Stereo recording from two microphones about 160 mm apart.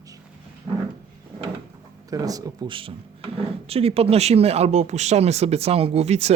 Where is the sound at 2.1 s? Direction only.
25° right (ahead or behind).